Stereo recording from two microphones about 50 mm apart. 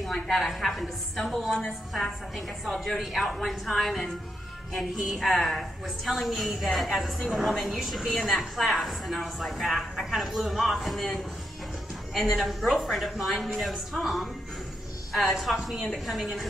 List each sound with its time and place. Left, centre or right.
0.0 s a woman's voice: centre
4.9 s a sound: centre
5.3 s a woman's voice: centre